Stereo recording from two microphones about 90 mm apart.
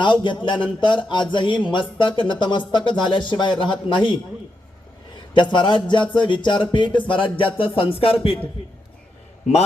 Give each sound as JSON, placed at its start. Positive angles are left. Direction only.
{"t": 0.0, "sound": "speech", "side_deg": 60}
{"t": 5.3, "sound": "speech", "side_deg": 60}
{"t": 7.6, "sound": "a man's voice", "side_deg": 90}